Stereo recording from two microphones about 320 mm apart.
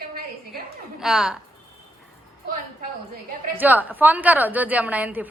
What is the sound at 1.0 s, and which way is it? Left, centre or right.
Speech, centre.